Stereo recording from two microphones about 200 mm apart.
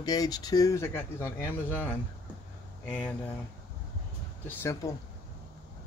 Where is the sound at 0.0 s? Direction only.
20° left (ahead or behind).